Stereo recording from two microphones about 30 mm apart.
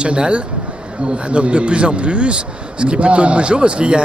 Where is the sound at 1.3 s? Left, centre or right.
Right.